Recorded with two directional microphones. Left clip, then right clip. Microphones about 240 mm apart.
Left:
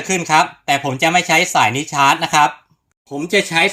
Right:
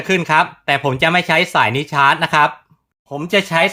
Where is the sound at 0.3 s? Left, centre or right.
Centre.